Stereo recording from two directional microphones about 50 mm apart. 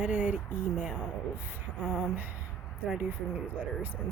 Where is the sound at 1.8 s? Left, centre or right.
Centre.